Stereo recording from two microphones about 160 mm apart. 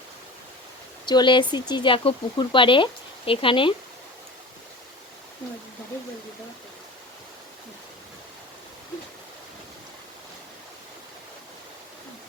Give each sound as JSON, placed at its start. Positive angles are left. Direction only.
{"t": 1.0, "sound": "speech", "side_deg": 30}